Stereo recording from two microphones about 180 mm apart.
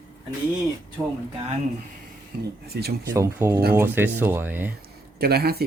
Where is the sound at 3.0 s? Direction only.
15° right (ahead or behind).